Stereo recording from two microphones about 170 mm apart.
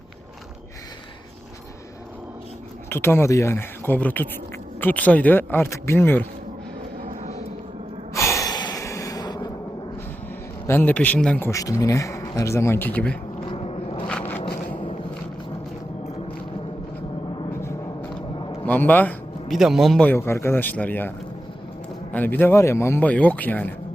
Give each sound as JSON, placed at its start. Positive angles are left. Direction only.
{"t": 2.9, "sound": "speech", "side_deg": 15}
{"t": 7.1, "sound": "vehicle", "side_deg": -45}
{"t": 8.1, "sound": "gasp", "side_deg": 15}
{"t": 10.7, "sound": "speech", "side_deg": 10}
{"t": 13.5, "sound": "a sound", "side_deg": 35}
{"t": 14.1, "sound": "a sound", "side_deg": 10}
{"t": 18.6, "sound": "a sound", "side_deg": 10}
{"t": 19.5, "sound": "speech", "side_deg": 0}
{"t": 20.1, "sound": "speech", "side_deg": 15}
{"t": 22.1, "sound": "speech", "side_deg": 10}